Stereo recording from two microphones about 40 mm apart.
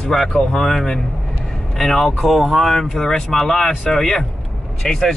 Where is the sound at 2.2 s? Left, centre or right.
Centre.